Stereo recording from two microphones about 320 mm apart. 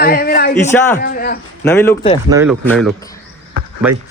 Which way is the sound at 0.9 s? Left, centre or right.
Left.